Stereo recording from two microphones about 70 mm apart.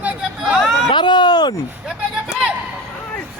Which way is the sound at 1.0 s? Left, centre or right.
Left.